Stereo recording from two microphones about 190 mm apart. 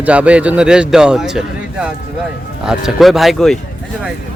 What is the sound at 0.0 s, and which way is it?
A man's voice, 5° right (ahead or behind).